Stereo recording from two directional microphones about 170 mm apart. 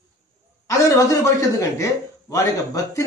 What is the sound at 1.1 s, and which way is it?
Speech, 20° left (ahead or behind).